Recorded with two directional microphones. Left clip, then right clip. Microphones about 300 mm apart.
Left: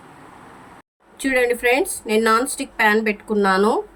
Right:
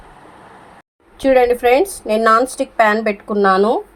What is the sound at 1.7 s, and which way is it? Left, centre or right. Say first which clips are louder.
Speech: right 5 dB; centre.